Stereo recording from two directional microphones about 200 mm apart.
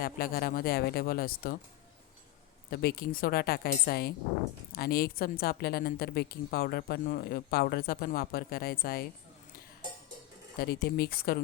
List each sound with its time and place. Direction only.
0.0 s a woman's voice: 45° left (ahead or behind)
2.6 s a woman's voice: 50° left (ahead or behind)
10.6 s a woman's voice: 50° left (ahead or behind)